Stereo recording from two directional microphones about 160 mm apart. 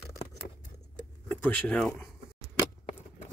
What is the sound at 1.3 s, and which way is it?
Speech, 10° left (ahead or behind).